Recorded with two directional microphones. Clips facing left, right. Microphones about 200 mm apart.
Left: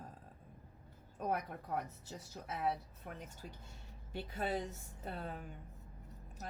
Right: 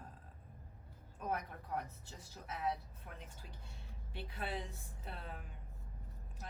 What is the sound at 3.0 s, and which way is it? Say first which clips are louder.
A woman's voice: left 6 dB; 40° left (ahead or behind).